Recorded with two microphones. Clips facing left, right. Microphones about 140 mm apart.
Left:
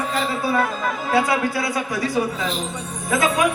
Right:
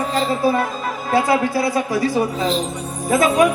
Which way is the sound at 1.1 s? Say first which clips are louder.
Right 4 dB; 30° right (ahead or behind).